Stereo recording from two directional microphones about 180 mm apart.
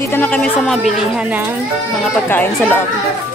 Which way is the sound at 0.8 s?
5° right (ahead or behind).